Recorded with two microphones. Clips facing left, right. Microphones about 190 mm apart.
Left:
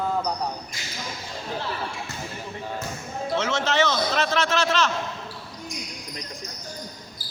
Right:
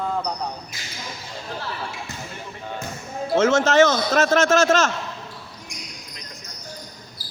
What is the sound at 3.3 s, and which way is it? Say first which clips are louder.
A man's voice: right 8 dB; 50° right (ahead or behind).